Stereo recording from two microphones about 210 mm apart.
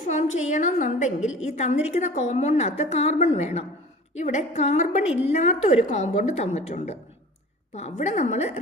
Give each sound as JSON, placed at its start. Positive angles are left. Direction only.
{"t": 0.1, "sound": "a woman's voice", "side_deg": 35}